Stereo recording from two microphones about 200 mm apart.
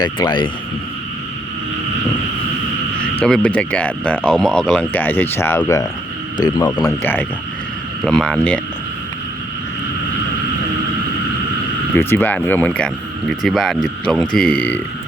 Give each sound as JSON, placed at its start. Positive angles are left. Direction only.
{"t": 0.0, "sound": "a man's voice", "side_deg": 25}
{"t": 3.0, "sound": "a man's voice", "side_deg": 5}
{"t": 7.0, "sound": "speech", "side_deg": 10}
{"t": 11.9, "sound": "speech", "side_deg": 10}